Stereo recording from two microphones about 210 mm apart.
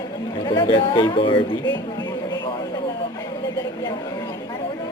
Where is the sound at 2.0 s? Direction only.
20° left (ahead or behind).